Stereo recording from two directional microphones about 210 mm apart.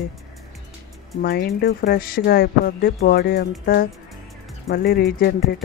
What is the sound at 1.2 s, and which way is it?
Speech, 50° left (ahead or behind).